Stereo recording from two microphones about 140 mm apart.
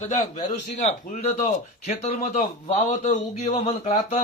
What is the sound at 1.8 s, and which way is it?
A man's voice, 50° left (ahead or behind).